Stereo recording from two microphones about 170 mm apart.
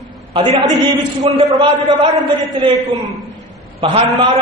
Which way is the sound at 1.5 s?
25° right (ahead or behind).